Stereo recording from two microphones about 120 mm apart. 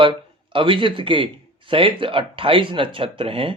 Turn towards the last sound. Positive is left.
turn(degrees=-50)  # may be behind; listen again after turning